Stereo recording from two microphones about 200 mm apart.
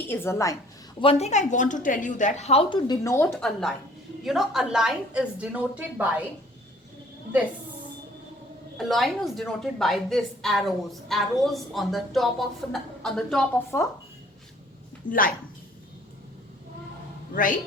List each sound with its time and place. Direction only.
0.1 s a woman's voice: 10° left (ahead or behind)
0.9 s a woman's voice: 30° left (ahead or behind); by 3.3 s 15° left (ahead or behind)
3.3 s a woman's voice: centre (ahead or behind)
8.8 s a woman's voice: centre (ahead or behind)
15.1 s speech: 40° left (ahead or behind)